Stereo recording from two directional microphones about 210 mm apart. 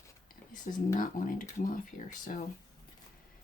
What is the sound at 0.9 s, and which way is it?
Speech, 40° left (ahead or behind).